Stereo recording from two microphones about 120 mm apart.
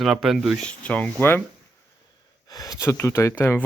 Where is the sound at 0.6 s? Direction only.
10° left (ahead or behind).